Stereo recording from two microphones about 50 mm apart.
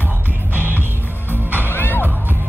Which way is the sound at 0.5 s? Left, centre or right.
Right.